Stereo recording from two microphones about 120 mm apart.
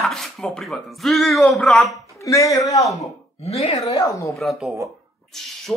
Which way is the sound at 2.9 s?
65° left (ahead or behind).